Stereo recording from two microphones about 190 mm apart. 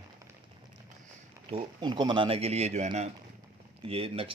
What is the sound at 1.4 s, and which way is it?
Speech, 30° right (ahead or behind).